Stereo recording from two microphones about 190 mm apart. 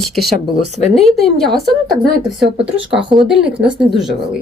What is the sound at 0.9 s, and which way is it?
Speech, centre (ahead or behind).